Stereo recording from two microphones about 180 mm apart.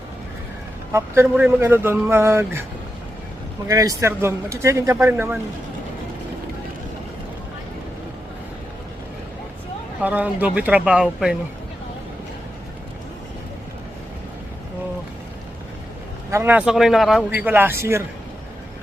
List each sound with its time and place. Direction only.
0.9 s speech: 15° right (ahead or behind)
3.7 s speech: 20° right (ahead or behind)
10.0 s speech: 10° right (ahead or behind)
16.3 s speech: 10° right (ahead or behind)